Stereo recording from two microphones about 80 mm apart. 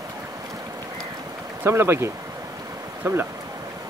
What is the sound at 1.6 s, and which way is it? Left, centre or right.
Speech, right.